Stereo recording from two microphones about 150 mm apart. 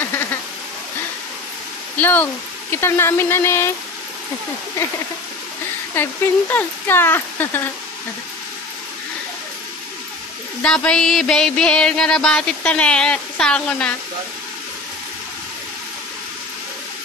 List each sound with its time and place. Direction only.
2.0 s speech: 10° left (ahead or behind)
6.0 s speech: 15° left (ahead or behind)
10.6 s a sound: 5° left (ahead or behind)